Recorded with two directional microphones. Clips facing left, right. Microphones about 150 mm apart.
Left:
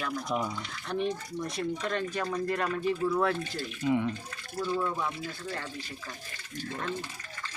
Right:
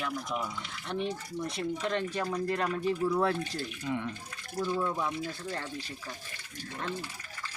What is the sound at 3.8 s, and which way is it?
Speech, 5° left (ahead or behind).